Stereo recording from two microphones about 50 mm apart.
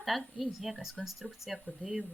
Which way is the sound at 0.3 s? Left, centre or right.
Centre.